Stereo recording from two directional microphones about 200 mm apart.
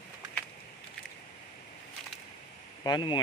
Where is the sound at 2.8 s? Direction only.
20° left (ahead or behind).